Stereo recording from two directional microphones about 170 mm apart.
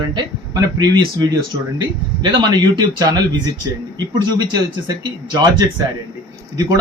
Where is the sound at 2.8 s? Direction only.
25° right (ahead or behind).